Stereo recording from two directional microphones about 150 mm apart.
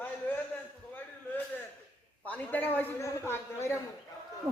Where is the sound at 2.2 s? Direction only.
10° left (ahead or behind).